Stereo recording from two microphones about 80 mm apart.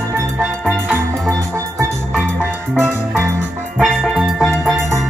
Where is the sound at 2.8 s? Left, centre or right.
Right.